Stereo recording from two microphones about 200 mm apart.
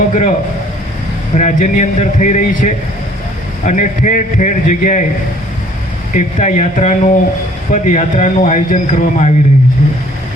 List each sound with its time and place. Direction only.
0.1 s a man's voice: 40° left (ahead or behind)
1.4 s speech: 40° left (ahead or behind)
6.1 s speech: 35° left (ahead or behind)